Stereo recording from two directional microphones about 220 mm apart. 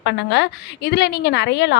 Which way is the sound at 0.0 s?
50° left (ahead or behind).